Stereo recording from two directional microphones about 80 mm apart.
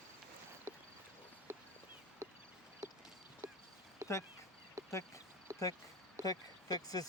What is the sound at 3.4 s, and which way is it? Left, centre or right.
Clip-clop, right.